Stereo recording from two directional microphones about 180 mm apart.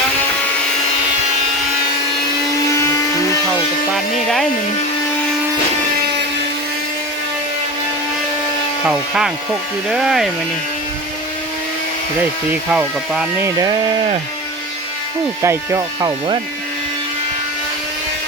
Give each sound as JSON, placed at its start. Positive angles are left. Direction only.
{"t": 2.6, "sound": "tools", "side_deg": 15}
{"t": 3.9, "sound": "speech", "side_deg": 0}
{"t": 8.8, "sound": "speech", "side_deg": -5}
{"t": 12.7, "sound": "speech", "side_deg": -5}
{"t": 13.6, "sound": "speech", "side_deg": -20}
{"t": 15.4, "sound": "speech", "side_deg": -15}
{"t": 16.0, "sound": "speech", "side_deg": -30}